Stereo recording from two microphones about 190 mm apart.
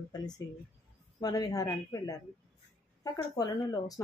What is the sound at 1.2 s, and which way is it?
Speech, 20° left (ahead or behind).